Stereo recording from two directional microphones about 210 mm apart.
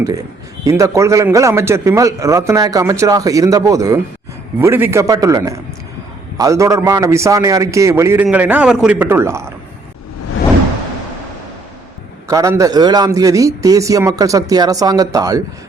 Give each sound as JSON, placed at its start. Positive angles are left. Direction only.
{"t": 0.6, "sound": "a man's voice", "side_deg": -15}
{"t": 12.3, "sound": "a man's voice", "side_deg": -15}